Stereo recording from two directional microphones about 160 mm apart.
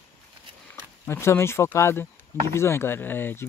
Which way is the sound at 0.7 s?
15° left (ahead or behind).